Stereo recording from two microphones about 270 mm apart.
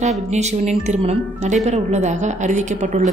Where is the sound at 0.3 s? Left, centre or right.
Right.